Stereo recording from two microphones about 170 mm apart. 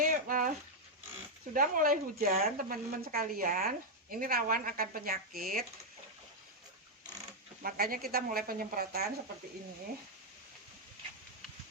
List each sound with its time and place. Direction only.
0.0 s a sound: 55° right (ahead or behind)
1.5 s a woman's voice: 55° right (ahead or behind)
7.6 s a woman's voice: 60° right (ahead or behind)